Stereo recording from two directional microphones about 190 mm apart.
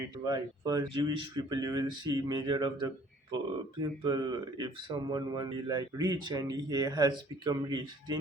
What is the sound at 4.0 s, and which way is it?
Speech, 20° right (ahead or behind).